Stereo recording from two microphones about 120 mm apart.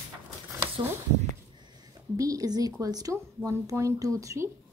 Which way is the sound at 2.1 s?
30° right (ahead or behind).